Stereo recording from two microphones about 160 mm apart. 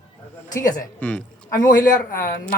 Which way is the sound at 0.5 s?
20° left (ahead or behind).